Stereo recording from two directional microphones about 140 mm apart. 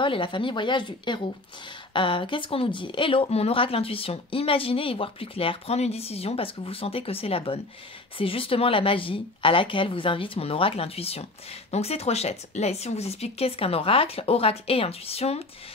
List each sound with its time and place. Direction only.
0.0 s a woman's voice: 35° left (ahead or behind)